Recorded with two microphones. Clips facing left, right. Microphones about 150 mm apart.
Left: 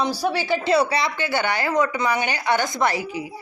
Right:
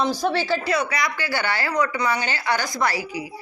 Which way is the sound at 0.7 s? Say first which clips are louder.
Left 4 dB; 30° left (ahead or behind).